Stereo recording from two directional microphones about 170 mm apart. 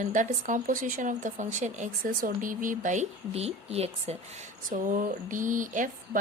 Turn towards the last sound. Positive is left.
turn(degrees=-50)  # may be behind; listen again after turning